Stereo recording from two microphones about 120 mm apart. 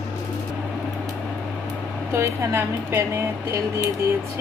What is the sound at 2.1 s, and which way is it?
A woman's voice, 25° right (ahead or behind).